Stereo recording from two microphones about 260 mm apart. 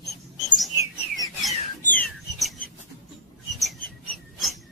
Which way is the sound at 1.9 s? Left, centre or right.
Centre.